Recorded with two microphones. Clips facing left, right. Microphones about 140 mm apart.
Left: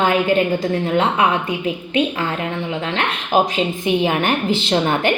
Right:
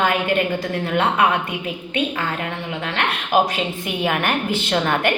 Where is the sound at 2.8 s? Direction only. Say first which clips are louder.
Left 2 dB; 30° left (ahead or behind).